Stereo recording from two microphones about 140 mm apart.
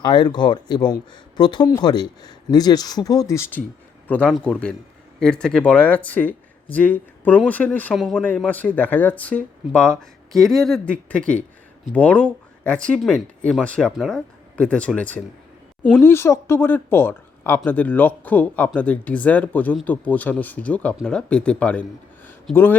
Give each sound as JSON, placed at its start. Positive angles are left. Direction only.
{"t": 0.0, "sound": "speech", "side_deg": 30}